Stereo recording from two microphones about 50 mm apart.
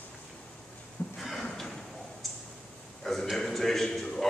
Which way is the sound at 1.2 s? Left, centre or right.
Centre.